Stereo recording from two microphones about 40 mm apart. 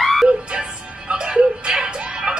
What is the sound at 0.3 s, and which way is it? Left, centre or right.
Music, right.